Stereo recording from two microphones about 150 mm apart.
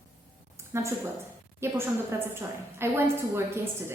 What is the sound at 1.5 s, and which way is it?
A woman's voice, 15° right (ahead or behind).